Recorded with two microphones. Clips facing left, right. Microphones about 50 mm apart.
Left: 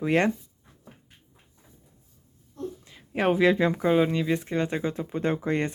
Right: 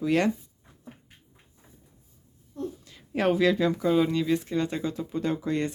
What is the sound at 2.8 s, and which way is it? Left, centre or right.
Speech, centre.